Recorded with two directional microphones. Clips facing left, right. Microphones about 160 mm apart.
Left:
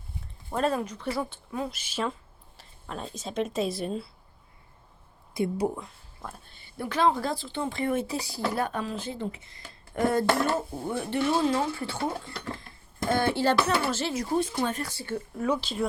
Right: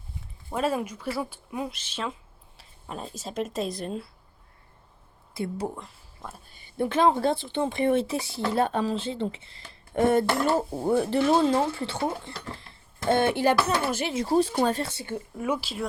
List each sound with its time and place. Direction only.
0.5 s a woman's voice: 10° right (ahead or behind)
1.7 s speech: 5° left (ahead or behind)
5.3 s speech: 15° left (ahead or behind)
5.7 s speech: centre (ahead or behind)
6.6 s speech: 25° right (ahead or behind)
10.8 s a woman's voice: 35° right (ahead or behind); by 14.1 s 15° right (ahead or behind)
14.1 s a woman's voice: 30° right (ahead or behind); by 15.9 s 5° right (ahead or behind)